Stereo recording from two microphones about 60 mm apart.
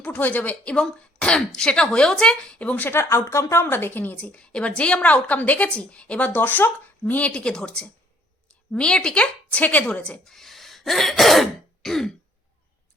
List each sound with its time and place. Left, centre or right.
0.0 s a woman's voice: left
3.0 s a woman's voice: left
4.2 s a woman's voice: centre
10.2 s throat clearing: centre